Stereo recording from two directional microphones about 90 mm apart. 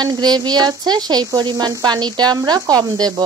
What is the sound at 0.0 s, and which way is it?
A woman's voice, 50° right (ahead or behind).